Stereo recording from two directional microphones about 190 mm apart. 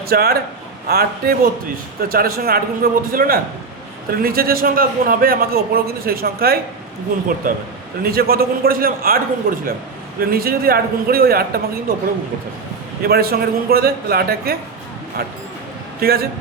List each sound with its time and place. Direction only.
0.1 s a man's voice: 55° right (ahead or behind)
8.0 s a man's voice: 55° right (ahead or behind)
13.0 s a man's voice: 55° right (ahead or behind)
16.0 s a man's voice: 55° right (ahead or behind)